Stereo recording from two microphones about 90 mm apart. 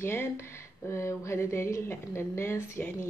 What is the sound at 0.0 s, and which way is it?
A woman's voice, 30° left (ahead or behind).